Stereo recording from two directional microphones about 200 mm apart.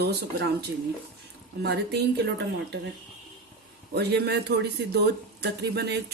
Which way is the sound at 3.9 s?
55° right (ahead or behind).